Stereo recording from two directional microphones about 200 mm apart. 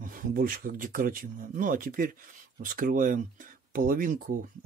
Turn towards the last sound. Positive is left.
turn(degrees=-45)  # may be behind; listen again after turning